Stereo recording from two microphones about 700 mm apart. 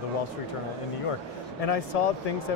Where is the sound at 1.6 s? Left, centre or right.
Left.